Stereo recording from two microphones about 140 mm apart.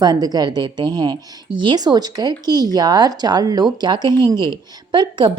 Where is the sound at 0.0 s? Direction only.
30° right (ahead or behind).